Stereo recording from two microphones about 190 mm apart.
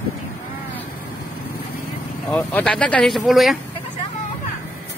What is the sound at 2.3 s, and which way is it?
Speech, 5° left (ahead or behind).